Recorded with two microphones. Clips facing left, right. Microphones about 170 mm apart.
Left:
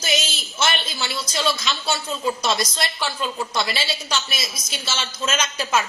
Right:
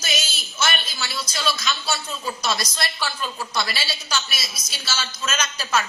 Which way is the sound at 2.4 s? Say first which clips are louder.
Left 3 dB; 20° left (ahead or behind).